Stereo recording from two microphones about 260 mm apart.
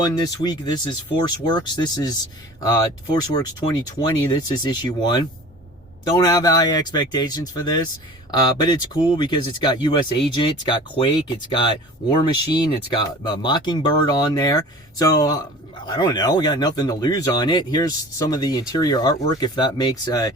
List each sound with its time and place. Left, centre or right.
0.0 s speech: centre